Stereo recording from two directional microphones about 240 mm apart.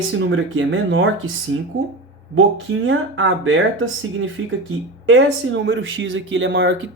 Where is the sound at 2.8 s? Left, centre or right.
Right.